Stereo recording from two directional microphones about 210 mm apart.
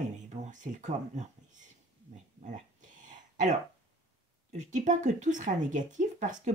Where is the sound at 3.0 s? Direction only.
35° right (ahead or behind).